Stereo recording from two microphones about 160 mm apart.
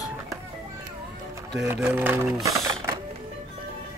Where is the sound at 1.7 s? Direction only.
10° right (ahead or behind).